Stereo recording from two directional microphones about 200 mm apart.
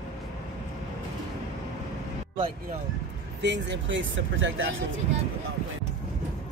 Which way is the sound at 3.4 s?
60° right (ahead or behind).